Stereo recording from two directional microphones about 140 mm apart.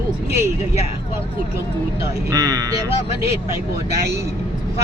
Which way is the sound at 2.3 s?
25° right (ahead or behind).